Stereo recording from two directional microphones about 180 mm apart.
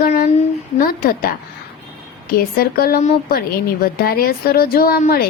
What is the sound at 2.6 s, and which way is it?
A woman's voice, 55° left (ahead or behind).